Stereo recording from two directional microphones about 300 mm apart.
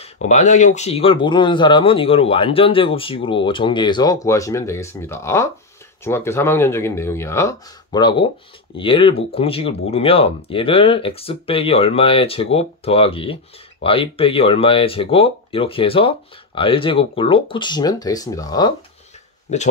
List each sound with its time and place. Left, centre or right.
0.0 s speech: left
19.5 s speech: left